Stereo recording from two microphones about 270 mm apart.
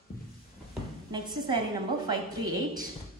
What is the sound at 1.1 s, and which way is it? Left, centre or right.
A woman's voice, centre.